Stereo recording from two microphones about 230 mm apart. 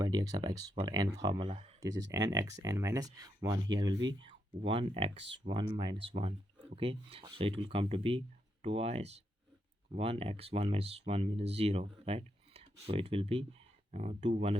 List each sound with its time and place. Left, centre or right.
0.0 s speech: centre
1.5 s speech: right
1.8 s speech: centre